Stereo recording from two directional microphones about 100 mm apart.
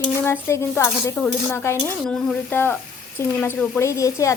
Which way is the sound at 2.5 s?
20° left (ahead or behind).